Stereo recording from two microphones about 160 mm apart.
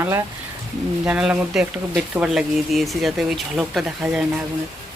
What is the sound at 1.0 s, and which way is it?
Speech, 5° right (ahead or behind).